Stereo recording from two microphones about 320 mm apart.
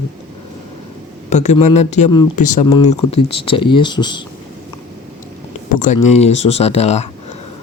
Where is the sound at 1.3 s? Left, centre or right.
Left.